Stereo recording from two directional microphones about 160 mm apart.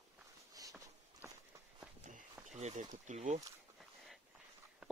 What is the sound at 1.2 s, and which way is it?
Walk, 10° right (ahead or behind).